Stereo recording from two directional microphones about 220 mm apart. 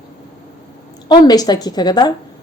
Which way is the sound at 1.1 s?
15° left (ahead or behind).